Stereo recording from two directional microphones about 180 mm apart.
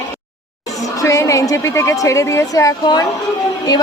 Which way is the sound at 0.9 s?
15° left (ahead or behind).